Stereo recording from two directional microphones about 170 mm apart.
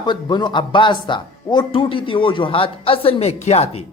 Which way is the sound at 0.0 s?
25° left (ahead or behind).